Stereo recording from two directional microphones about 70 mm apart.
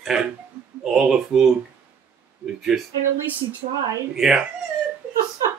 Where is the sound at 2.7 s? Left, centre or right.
Centre.